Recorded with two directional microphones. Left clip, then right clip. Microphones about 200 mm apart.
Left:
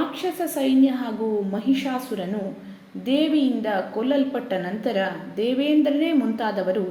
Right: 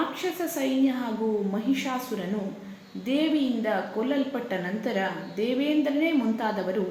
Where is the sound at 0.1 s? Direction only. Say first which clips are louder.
Left 4 dB; 15° left (ahead or behind).